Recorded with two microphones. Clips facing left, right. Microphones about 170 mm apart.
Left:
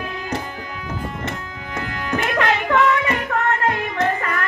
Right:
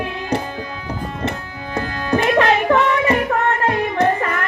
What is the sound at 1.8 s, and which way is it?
Music, 30° right (ahead or behind).